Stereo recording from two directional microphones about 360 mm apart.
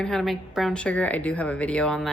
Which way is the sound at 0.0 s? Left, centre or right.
Centre.